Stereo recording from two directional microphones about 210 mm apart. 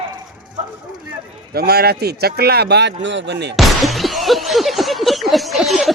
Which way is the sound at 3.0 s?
55° right (ahead or behind).